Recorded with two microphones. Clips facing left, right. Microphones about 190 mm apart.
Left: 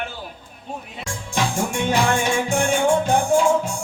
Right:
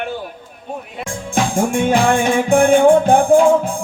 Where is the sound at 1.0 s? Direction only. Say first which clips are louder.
Right 5 dB; 50° right (ahead or behind).